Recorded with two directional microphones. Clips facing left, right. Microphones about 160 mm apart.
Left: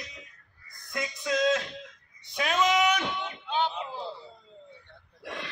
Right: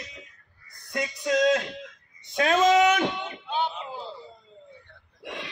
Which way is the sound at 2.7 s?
45° right (ahead or behind).